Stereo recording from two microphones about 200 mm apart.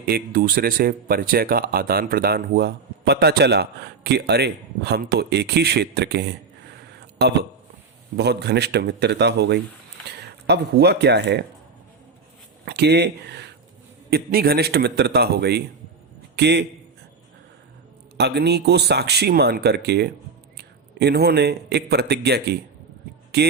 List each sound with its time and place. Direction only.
0.0 s speech: 45° right (ahead or behind)
12.6 s a man's voice: 55° right (ahead or behind)
18.2 s a man's voice: 55° right (ahead or behind)